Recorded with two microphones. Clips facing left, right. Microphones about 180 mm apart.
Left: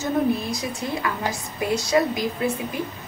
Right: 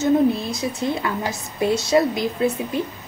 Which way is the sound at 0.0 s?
25° right (ahead or behind).